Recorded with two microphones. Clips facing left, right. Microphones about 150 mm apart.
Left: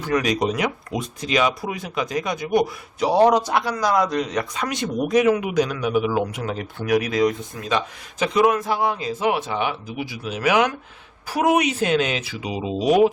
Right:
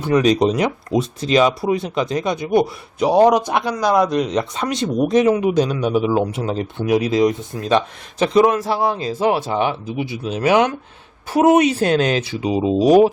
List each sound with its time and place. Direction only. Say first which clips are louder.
0.0 s speech: right 6 dB; 25° right (ahead or behind)